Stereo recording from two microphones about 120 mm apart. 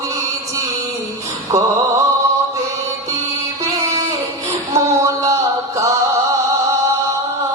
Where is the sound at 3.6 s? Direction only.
25° right (ahead or behind).